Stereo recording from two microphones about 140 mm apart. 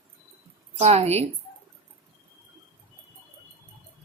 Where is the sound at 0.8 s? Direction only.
50° right (ahead or behind).